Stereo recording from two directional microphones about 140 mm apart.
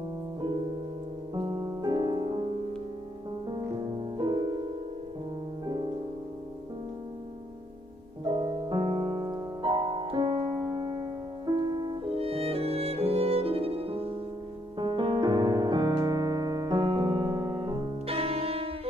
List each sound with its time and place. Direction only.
1.3 s music: 30° right (ahead or behind)
3.9 s music: 35° right (ahead or behind)
8.2 s music: 30° right (ahead or behind)
14.8 s piano: 35° right (ahead or behind)
18.0 s music: 45° right (ahead or behind)